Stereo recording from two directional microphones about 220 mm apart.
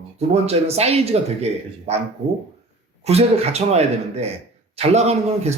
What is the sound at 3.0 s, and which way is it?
A man's voice, 30° right (ahead or behind).